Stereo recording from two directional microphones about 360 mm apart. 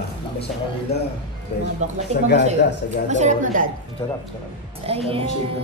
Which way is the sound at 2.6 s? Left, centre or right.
Left.